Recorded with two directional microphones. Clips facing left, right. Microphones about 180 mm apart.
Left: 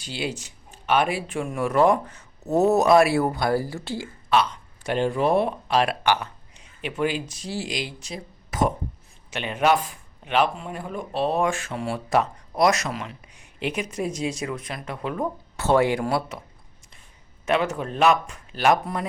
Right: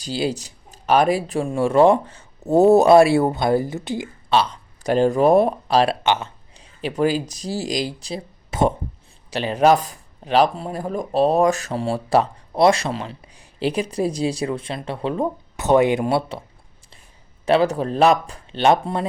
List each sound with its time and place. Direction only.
0.0 s speech: 35° right (ahead or behind); by 4.1 s 20° right (ahead or behind)
4.3 s speech: 30° right (ahead or behind)
17.4 s speech: 35° right (ahead or behind)